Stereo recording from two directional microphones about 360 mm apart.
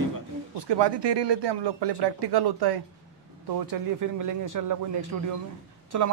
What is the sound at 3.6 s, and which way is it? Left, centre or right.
A man's voice, right.